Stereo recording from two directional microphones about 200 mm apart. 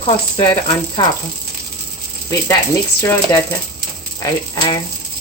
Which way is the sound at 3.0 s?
15° left (ahead or behind).